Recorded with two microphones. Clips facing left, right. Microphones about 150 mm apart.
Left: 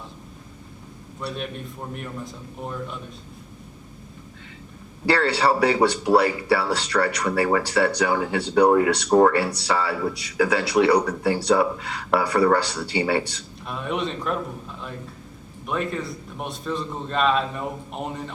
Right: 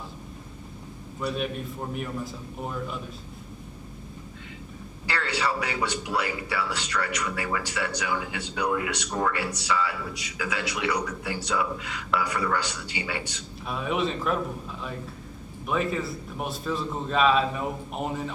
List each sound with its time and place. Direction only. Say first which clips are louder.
1.2 s a man's voice: right 2 dB; centre (ahead or behind)
5.0 s speech: left 9 dB; 35° left (ahead or behind)
13.7 s a man's voice: even; centre (ahead or behind)